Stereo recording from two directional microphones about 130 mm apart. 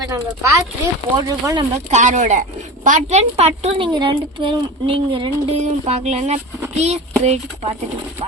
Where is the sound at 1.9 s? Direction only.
70° right (ahead or behind); by 5.5 s 40° right (ahead or behind).